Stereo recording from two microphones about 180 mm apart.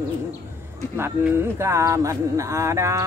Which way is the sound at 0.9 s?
15° right (ahead or behind).